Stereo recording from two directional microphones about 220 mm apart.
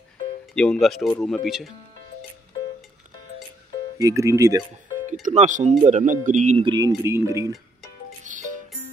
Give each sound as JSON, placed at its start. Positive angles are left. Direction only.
{"t": 0.6, "sound": "speech", "side_deg": 0}
{"t": 4.0, "sound": "speech", "side_deg": -15}
{"t": 5.2, "sound": "speech", "side_deg": -35}
{"t": 8.2, "sound": "music", "side_deg": -35}